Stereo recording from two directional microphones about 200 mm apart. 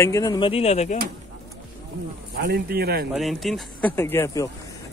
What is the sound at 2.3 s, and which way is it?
Speech, 55° right (ahead or behind).